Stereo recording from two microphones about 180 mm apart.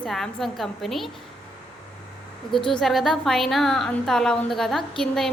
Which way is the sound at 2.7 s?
Centre (ahead or behind).